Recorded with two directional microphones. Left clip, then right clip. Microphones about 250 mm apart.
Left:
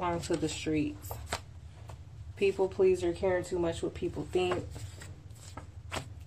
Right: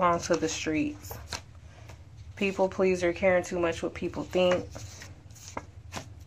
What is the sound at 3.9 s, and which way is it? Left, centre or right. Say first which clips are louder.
Speech: right 4 dB; centre.